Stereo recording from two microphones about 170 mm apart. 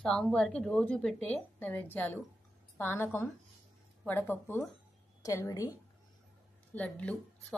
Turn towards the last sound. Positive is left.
turn(degrees=10)  # may be behind; listen again after turning